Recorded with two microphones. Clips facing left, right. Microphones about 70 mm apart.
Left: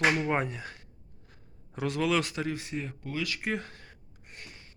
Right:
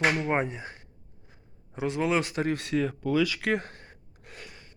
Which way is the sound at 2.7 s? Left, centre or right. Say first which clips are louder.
Right 9 dB; right.